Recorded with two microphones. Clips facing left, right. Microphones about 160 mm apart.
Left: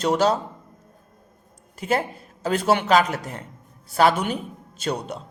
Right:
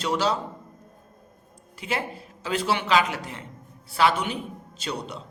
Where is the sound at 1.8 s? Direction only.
45° left (ahead or behind).